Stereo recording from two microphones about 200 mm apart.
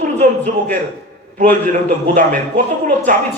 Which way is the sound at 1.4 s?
40° right (ahead or behind).